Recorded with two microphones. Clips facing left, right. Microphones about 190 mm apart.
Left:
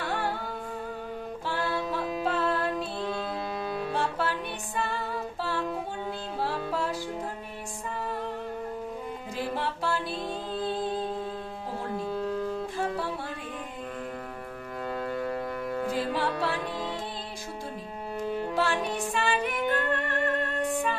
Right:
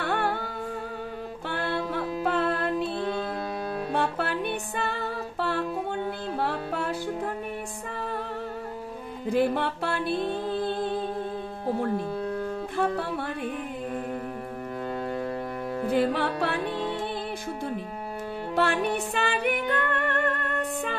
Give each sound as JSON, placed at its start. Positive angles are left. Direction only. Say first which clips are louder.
{"t": 0.0, "sound": "humming", "louder": "right 4 dB", "side_deg": -60}
{"t": 1.5, "sound": "music", "louder": "right 1 dB", "side_deg": -60}
{"t": 3.9, "sound": "music", "louder": "right 4 dB", "side_deg": -60}
{"t": 6.4, "sound": "music", "louder": "even", "side_deg": -60}
{"t": 9.3, "sound": "music", "louder": "right 8 dB", "side_deg": -60}
{"t": 12.7, "sound": "music", "louder": "right 4 dB", "side_deg": -60}
{"t": 15.9, "sound": "music", "louder": "right 7 dB", "side_deg": -60}
{"t": 18.5, "sound": "music", "louder": "right 7 dB", "side_deg": -60}